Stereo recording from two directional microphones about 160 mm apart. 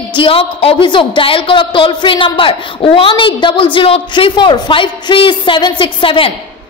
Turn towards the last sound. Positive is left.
turn(degrees=35)  # may be behind; listen again after turning